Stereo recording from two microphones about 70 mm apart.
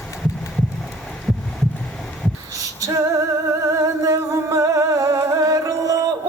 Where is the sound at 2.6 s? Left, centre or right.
Right.